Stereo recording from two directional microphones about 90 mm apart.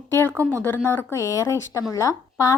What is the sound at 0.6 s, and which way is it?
Speech, 25° left (ahead or behind).